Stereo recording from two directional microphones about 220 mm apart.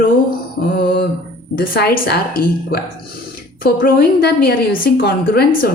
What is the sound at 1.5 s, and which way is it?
A woman's voice, 40° left (ahead or behind).